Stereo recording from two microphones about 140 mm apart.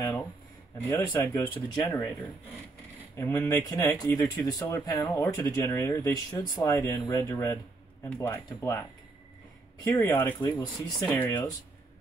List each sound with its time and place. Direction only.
0.8 s speech: 20° left (ahead or behind)
1.9 s speech: 10° left (ahead or behind)
3.2 s speech: 20° left (ahead or behind)
9.8 s speech: 15° left (ahead or behind)
11.1 s speech: 10° left (ahead or behind)